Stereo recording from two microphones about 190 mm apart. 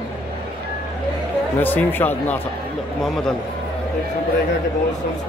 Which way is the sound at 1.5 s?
10° left (ahead or behind).